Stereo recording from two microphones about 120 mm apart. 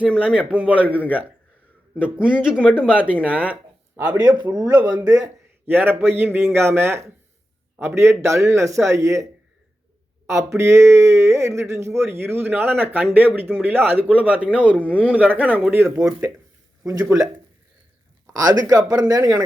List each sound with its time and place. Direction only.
0.3 s speech: 10° right (ahead or behind)
4.0 s a man's voice: 35° right (ahead or behind)
5.6 s a man's voice: 15° right (ahead or behind)
10.6 s a man's voice: 25° right (ahead or behind)
18.3 s speech: 30° right (ahead or behind)